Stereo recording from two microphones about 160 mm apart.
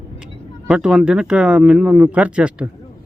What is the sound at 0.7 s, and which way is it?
A man's voice, 5° right (ahead or behind).